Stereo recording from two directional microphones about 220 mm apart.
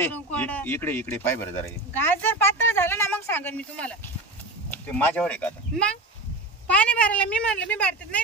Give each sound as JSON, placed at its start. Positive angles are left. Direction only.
{"t": 0.0, "sound": "a woman's voice", "side_deg": 5}